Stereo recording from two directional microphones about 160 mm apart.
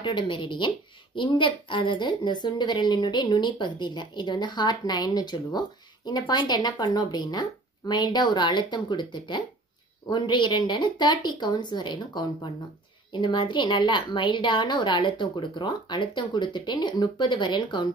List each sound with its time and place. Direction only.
0.0 s a woman's voice: 30° left (ahead or behind)